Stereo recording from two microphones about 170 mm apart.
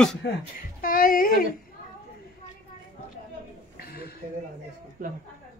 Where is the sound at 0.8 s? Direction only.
55° left (ahead or behind).